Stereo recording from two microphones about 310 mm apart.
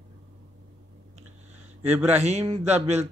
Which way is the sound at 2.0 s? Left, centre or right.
Right.